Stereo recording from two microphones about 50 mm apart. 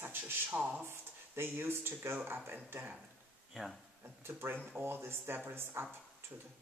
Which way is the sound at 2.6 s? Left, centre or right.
Right.